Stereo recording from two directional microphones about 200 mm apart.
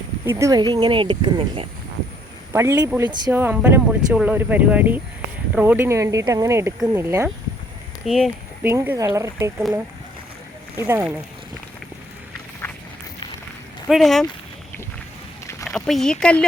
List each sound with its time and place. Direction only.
0.3 s speech: 15° right (ahead or behind)
2.5 s speech: 15° right (ahead or behind)
8.0 s speech: centre (ahead or behind)
10.8 s speech: 10° right (ahead or behind)
12.6 s run: 10° left (ahead or behind)
13.8 s speech: centre (ahead or behind)
15.6 s speech: centre (ahead or behind)